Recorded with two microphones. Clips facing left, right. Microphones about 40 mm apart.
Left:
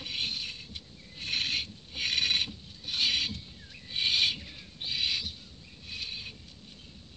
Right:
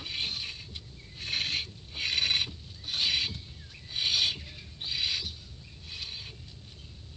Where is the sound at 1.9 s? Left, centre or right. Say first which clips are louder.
Even; left.